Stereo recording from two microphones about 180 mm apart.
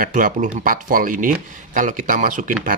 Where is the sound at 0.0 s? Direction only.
50° right (ahead or behind).